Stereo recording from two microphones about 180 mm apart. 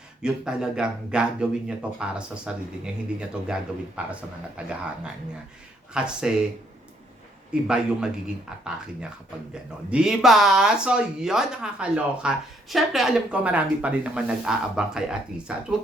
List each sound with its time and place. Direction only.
0.2 s speech: 5° right (ahead or behind)
5.9 s speech: 5° right (ahead or behind)
7.5 s speech: 5° right (ahead or behind)
9.9 s speech: 5° right (ahead or behind)